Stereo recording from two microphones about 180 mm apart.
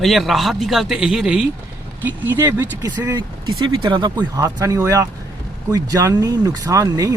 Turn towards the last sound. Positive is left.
turn(degrees=-20)  # may be behind; listen again after turning